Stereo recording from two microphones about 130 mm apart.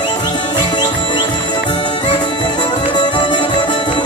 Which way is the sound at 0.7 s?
35° left (ahead or behind).